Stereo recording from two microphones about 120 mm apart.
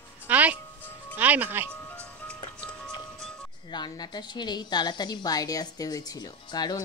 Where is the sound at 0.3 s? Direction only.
10° right (ahead or behind).